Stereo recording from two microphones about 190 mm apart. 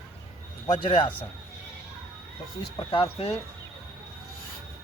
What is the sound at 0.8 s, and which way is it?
Speech, 25° left (ahead or behind).